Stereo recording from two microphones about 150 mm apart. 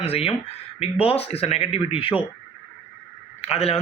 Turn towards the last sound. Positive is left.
turn(degrees=45)  # may be behind; listen again after turning